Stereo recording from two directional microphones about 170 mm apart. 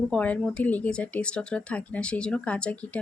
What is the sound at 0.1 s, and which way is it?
Speech, 5° left (ahead or behind).